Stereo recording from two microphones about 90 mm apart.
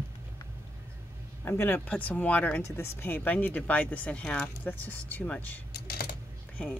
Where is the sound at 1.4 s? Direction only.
25° left (ahead or behind).